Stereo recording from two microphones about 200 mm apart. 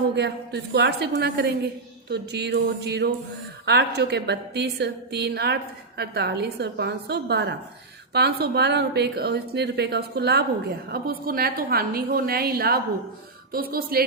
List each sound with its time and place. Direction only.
0.2 s a woman's voice: 55° right (ahead or behind)